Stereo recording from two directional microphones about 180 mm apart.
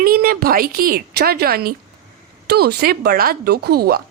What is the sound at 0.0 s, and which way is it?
A woman's voice, 55° right (ahead or behind).